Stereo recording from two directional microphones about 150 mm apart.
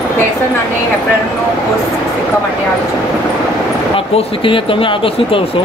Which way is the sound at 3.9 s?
35° left (ahead or behind).